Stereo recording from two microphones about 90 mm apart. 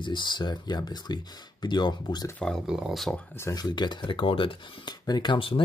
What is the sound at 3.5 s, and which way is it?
Speech, 50° left (ahead or behind).